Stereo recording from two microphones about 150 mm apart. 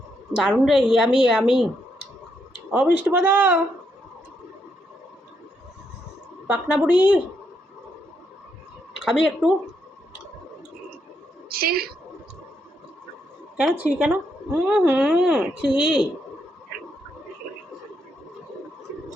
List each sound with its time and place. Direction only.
0.3 s a woman's voice: 5° right (ahead or behind)
2.7 s a woman's voice: 10° right (ahead or behind)
6.5 s a woman's voice: 10° right (ahead or behind)
9.0 s speech: 5° right (ahead or behind)
11.4 s a sound: 90° right
13.6 s a woman's voice: 10° right (ahead or behind)